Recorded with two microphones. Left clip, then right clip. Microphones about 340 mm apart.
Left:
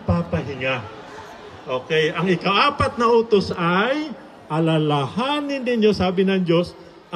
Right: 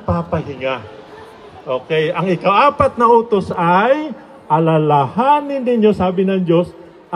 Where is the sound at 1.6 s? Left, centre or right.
Centre.